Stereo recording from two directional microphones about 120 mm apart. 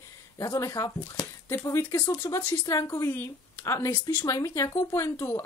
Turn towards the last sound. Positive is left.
turn(degrees=25)  # may be behind; listen again after turning